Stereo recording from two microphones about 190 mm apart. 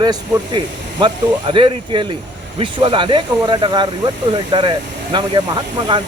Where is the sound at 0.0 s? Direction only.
20° right (ahead or behind).